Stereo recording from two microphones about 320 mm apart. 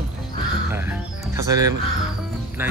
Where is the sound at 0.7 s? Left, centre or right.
Centre.